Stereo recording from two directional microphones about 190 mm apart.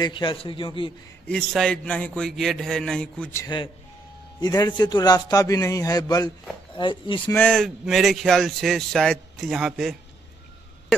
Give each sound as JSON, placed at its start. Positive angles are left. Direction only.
{"t": 0.0, "sound": "a man's voice", "side_deg": 25}
{"t": 1.2, "sound": "a man's voice", "side_deg": 0}
{"t": 7.2, "sound": "speech", "side_deg": 10}